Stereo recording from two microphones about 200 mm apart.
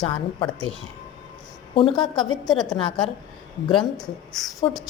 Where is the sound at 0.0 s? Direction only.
25° left (ahead or behind).